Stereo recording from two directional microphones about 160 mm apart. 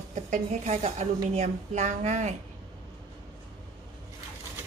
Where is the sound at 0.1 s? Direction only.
45° right (ahead or behind).